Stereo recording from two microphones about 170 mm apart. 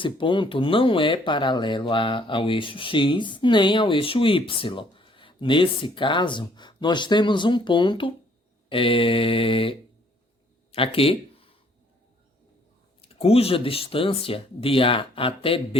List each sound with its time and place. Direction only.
0.0 s speech: 30° left (ahead or behind)
13.0 s speech: 35° left (ahead or behind)